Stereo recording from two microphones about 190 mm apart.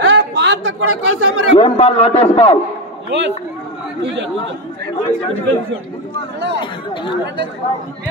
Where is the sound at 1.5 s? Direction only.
35° left (ahead or behind).